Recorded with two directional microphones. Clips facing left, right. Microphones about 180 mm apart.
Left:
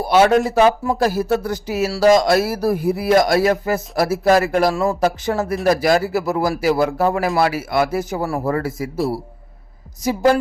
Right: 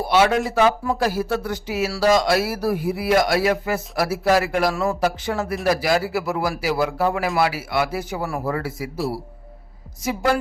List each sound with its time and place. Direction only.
0.0 s speech: 40° left (ahead or behind)
4.7 s speech: 30° left (ahead or behind)
4.9 s a man's voice: 45° left (ahead or behind)
10.0 s speech: 40° left (ahead or behind)